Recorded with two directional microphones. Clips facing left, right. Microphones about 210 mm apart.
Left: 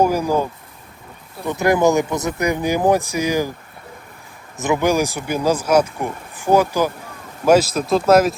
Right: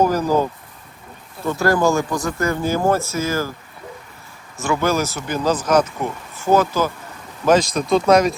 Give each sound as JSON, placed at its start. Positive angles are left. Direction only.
{"t": 0.0, "sound": "speech", "side_deg": 10}
{"t": 1.5, "sound": "speech", "side_deg": 20}
{"t": 4.5, "sound": "speech", "side_deg": 20}